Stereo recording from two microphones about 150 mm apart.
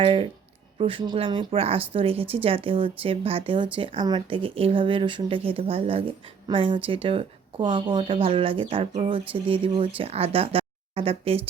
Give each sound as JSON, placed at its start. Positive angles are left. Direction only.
{"t": 0.0, "sound": "speech", "side_deg": -35}